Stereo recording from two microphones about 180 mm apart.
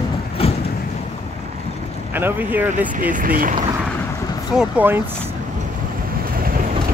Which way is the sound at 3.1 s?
50° right (ahead or behind).